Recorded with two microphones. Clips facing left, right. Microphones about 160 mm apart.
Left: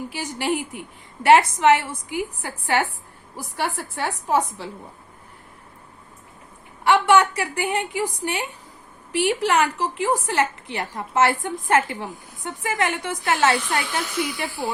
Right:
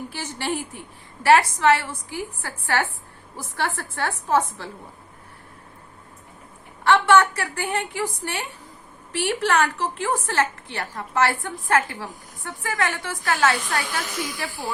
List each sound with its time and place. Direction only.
0.1 s a woman's voice: 15° left (ahead or behind)
6.8 s a woman's voice: 15° left (ahead or behind)